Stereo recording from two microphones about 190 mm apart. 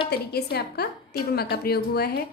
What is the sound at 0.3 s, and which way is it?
A woman's voice, 55° left (ahead or behind).